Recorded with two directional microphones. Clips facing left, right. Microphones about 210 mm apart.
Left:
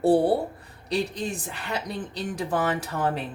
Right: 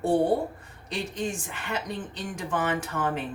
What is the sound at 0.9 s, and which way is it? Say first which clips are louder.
Speech: left 3 dB; 35° left (ahead or behind).